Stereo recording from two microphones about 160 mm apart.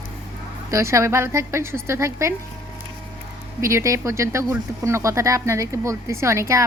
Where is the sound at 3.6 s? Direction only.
20° right (ahead or behind).